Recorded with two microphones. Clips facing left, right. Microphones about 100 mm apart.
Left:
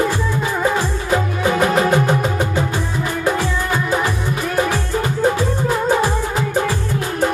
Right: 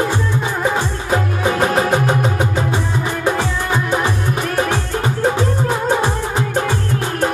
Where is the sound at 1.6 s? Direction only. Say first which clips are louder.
Left 1 dB; centre (ahead or behind).